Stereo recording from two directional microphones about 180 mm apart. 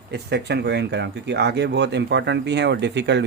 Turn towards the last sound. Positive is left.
turn(degrees=-70)  # may be behind; listen again after turning